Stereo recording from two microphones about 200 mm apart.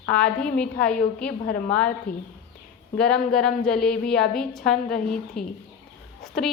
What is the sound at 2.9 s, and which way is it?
A woman's voice, 5° left (ahead or behind).